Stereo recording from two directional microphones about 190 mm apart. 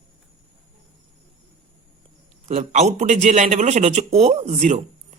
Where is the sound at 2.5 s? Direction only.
35° right (ahead or behind).